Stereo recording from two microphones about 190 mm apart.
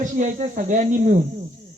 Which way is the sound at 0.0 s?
40° right (ahead or behind).